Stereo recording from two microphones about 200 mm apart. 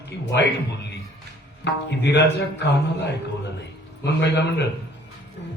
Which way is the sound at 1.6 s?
60° left (ahead or behind).